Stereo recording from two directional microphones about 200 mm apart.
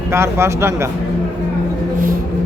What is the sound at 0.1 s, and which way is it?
Speech, 15° right (ahead or behind).